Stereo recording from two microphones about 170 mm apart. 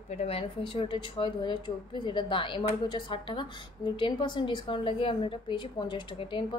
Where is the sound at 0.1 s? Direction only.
35° left (ahead or behind).